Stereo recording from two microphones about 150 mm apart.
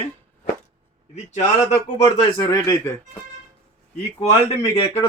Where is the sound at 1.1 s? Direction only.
50° left (ahead or behind).